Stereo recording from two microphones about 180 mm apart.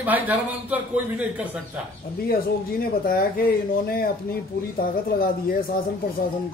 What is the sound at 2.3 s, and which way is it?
Speech, 55° left (ahead or behind).